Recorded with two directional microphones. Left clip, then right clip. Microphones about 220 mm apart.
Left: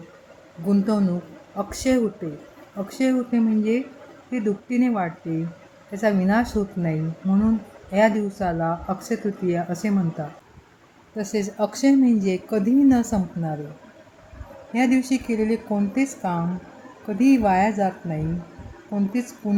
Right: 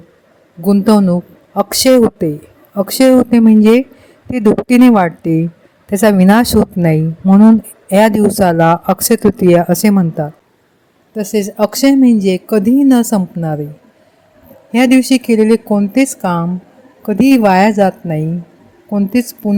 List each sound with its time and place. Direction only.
0.7 s a woman's voice: 45° right (ahead or behind)
14.7 s a woman's voice: 45° right (ahead or behind)